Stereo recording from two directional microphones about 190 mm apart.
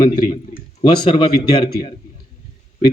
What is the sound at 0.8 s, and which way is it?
Speech, 25° left (ahead or behind).